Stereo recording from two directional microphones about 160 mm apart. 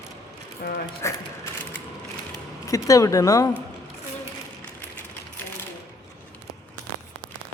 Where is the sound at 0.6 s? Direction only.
65° left (ahead or behind).